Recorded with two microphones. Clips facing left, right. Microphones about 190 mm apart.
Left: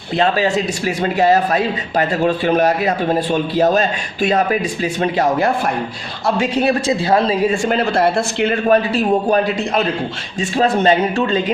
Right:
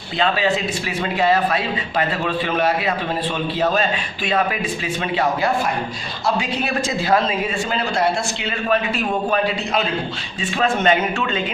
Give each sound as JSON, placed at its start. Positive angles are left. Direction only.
{"t": 0.2, "sound": "speech", "side_deg": 40}
{"t": 7.7, "sound": "speech", "side_deg": 60}
{"t": 10.6, "sound": "speech", "side_deg": 35}